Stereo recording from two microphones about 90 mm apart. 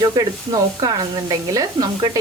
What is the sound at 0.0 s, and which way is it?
Speech, 45° right (ahead or behind).